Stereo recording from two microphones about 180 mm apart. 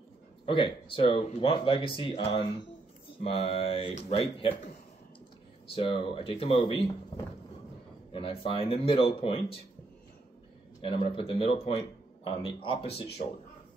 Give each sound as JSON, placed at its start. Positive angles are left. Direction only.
{"t": 0.5, "sound": "speech", "side_deg": 30}
{"t": 5.8, "sound": "speech", "side_deg": 30}
{"t": 10.8, "sound": "speech", "side_deg": 30}